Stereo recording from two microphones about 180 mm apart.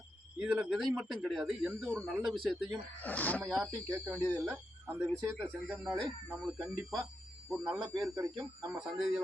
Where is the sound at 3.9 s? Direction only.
15° right (ahead or behind).